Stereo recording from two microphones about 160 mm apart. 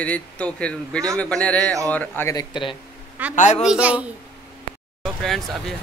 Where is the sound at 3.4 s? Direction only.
45° left (ahead or behind).